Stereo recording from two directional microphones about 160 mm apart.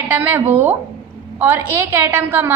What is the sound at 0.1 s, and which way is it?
A woman's voice, 15° right (ahead or behind).